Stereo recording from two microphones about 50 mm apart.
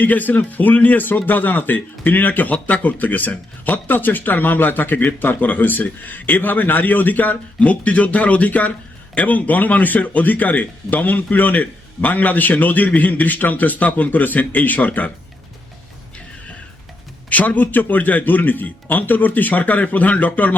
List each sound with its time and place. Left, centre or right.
0.0 s a man's voice: left
17.2 s a man's voice: left